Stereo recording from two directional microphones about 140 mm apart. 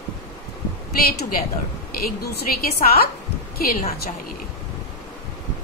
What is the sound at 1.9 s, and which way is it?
A woman's voice, 90° left.